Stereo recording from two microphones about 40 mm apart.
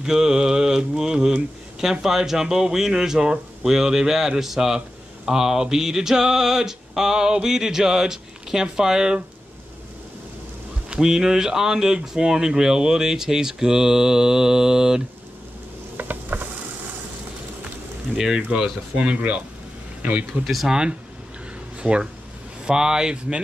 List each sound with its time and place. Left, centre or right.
0.0 s speech: centre
11.0 s speech: centre
16.0 s a sound: right
18.1 s speech: centre
18.5 s speech: right
20.6 s speech: centre